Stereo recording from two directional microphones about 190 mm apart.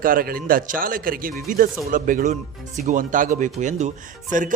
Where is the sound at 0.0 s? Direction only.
50° right (ahead or behind).